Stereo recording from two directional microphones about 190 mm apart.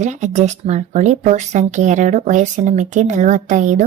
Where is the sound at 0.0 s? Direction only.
40° right (ahead or behind).